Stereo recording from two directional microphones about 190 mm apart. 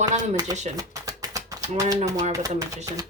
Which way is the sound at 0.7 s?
15° right (ahead or behind).